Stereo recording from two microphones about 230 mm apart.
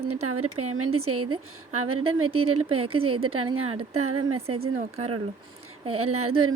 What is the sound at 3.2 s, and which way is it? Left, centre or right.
A woman's voice, right.